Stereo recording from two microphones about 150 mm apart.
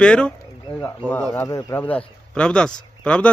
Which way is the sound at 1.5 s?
20° left (ahead or behind).